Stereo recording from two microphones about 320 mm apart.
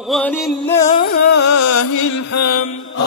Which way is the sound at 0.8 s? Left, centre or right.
Left.